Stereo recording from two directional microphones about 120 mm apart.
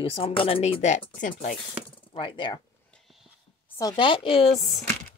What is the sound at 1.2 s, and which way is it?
Speech, 90° left.